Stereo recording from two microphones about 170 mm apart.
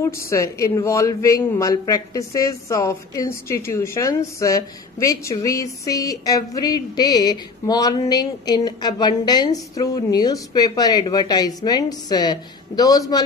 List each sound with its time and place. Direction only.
0.0 s speech: 15° left (ahead or behind)